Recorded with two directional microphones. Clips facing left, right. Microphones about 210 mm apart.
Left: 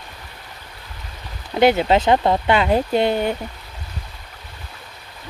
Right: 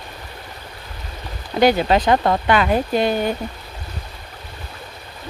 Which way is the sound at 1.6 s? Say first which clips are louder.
Even; 25° left (ahead or behind).